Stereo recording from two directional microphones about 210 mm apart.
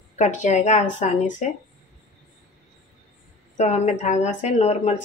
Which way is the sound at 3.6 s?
35° left (ahead or behind).